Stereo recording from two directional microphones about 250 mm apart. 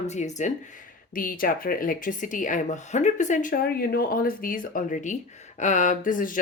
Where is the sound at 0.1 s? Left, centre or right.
Left.